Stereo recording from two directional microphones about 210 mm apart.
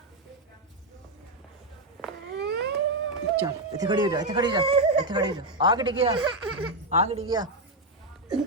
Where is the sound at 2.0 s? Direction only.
Centre (ahead or behind).